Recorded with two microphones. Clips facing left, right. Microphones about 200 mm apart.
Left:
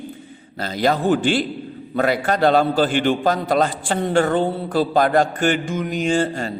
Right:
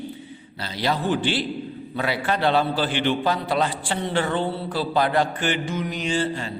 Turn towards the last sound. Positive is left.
turn(degrees=45)  # may be behind; listen again after turning